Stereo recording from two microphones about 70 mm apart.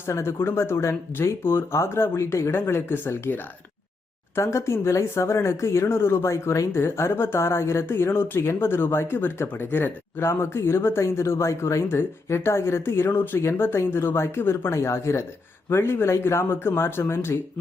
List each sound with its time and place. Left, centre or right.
0.0 s speech: left
4.4 s speech: left